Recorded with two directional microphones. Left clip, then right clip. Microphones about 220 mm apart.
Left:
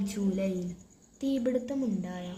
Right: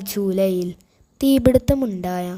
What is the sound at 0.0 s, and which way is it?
A woman's voice, 50° right (ahead or behind).